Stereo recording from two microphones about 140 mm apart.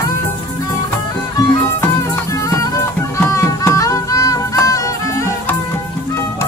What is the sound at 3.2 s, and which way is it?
Music, 20° left (ahead or behind).